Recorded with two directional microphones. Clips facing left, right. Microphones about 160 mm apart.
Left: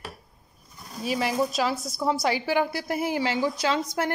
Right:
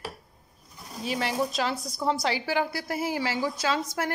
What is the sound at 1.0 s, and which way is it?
A woman's voice, 10° left (ahead or behind).